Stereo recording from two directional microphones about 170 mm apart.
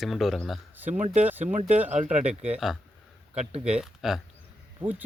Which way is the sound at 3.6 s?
5° right (ahead or behind).